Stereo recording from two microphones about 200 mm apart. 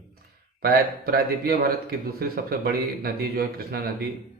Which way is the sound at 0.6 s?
50° right (ahead or behind).